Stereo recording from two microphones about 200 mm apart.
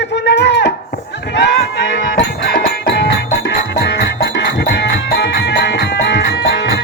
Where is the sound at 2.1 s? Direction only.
55° left (ahead or behind).